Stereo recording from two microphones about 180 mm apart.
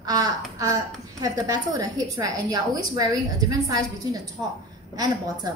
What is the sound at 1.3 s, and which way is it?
A woman's voice, 20° right (ahead or behind).